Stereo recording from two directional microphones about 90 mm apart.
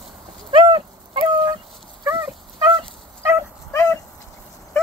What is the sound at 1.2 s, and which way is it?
Fowl, 45° right (ahead or behind).